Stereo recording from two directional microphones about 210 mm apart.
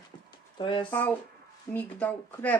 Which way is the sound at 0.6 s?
25° left (ahead or behind).